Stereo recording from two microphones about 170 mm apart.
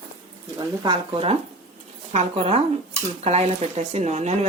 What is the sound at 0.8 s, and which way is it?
A woman's voice, 30° right (ahead or behind).